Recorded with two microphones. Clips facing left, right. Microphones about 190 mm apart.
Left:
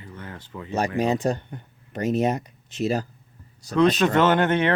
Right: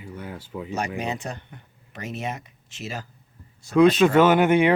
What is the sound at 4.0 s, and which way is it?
Speech, 10° right (ahead or behind).